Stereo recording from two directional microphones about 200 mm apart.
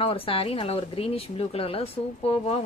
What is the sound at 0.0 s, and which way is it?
Speech, 30° left (ahead or behind).